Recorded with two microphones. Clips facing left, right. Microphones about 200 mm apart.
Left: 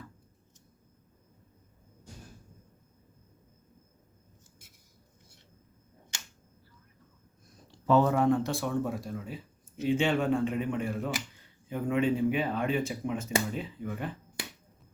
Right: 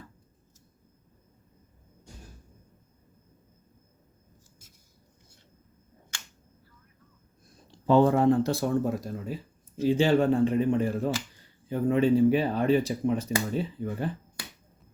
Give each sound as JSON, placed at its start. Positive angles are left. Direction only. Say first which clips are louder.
{"t": 7.9, "sound": "speech", "louder": "right 3 dB", "side_deg": -30}